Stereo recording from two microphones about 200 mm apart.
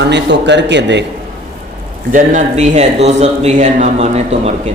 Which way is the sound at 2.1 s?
35° right (ahead or behind).